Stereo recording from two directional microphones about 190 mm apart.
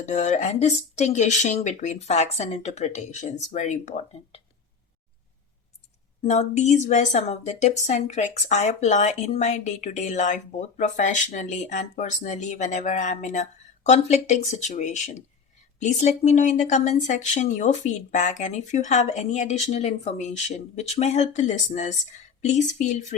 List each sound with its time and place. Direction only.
0.0 s speech: 40° left (ahead or behind)
6.2 s speech: 35° left (ahead or behind)